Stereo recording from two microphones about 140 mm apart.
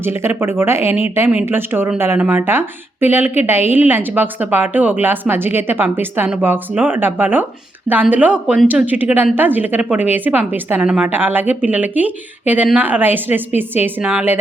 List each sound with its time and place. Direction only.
0.0 s speech: 15° right (ahead or behind)